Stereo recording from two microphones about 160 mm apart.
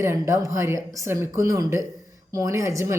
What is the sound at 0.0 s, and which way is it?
A woman's voice, 20° right (ahead or behind).